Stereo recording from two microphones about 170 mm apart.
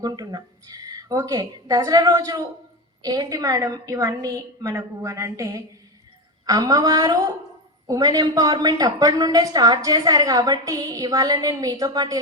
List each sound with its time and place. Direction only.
0.0 s a woman's voice: 25° right (ahead or behind)